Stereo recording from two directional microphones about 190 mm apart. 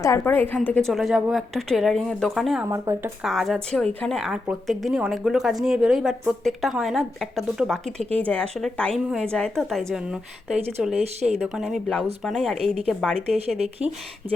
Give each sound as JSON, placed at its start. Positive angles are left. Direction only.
{"t": 0.0, "sound": "a woman's voice", "side_deg": 15}
{"t": 2.6, "sound": "speech", "side_deg": -15}
{"t": 3.2, "sound": "a woman's voice", "side_deg": 0}
{"t": 11.0, "sound": "speech", "side_deg": -35}
{"t": 11.4, "sound": "a woman's voice", "side_deg": -5}